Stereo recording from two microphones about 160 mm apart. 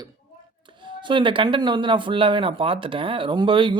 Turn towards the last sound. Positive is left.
turn(degrees=-30)  # may be behind; listen again after turning